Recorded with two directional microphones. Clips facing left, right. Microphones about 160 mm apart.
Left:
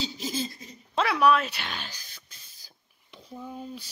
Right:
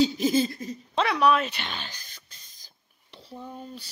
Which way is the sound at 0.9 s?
5° left (ahead or behind).